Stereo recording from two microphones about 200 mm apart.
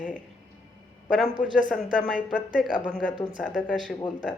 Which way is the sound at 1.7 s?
Centre (ahead or behind).